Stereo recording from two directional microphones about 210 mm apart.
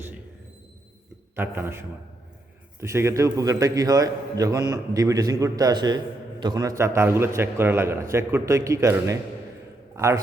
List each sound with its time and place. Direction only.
1.4 s a man's voice: 10° right (ahead or behind)
2.8 s a man's voice: 15° right (ahead or behind)